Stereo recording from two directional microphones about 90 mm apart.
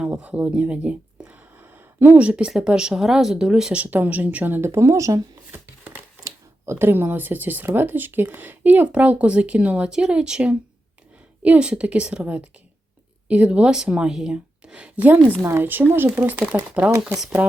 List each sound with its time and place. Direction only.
0.1 s speech: 20° right (ahead or behind); by 5.2 s 35° right (ahead or behind)
5.5 s a sound: 20° right (ahead or behind)
6.2 s a woman's voice: 25° right (ahead or behind); by 15.1 s 10° right (ahead or behind)
15.4 s speech: 25° right (ahead or behind)
16.3 s a woman's voice: 10° right (ahead or behind)